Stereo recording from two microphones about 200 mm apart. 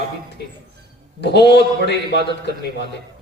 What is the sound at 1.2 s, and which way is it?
A man's voice, 55° left (ahead or behind).